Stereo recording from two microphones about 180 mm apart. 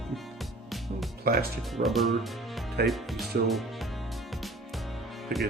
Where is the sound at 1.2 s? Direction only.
55° right (ahead or behind).